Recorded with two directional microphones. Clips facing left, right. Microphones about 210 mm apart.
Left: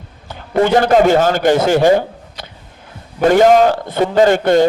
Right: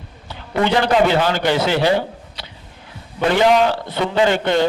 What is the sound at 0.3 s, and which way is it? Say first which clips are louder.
A man's voice: left 5 dB; 45° left (ahead or behind).